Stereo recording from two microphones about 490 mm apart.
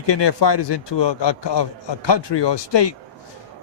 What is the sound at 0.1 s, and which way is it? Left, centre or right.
A man's voice, left.